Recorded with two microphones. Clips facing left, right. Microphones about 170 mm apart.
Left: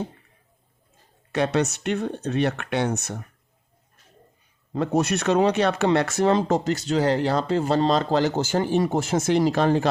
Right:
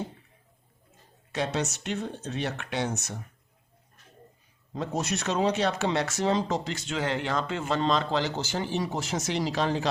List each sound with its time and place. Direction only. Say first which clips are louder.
1.3 s speech: left 7 dB; 60° left (ahead or behind)
4.7 s speech: left 8 dB; 60° left (ahead or behind)